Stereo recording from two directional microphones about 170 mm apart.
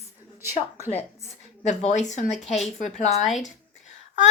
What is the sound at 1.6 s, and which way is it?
Speech, 45° left (ahead or behind).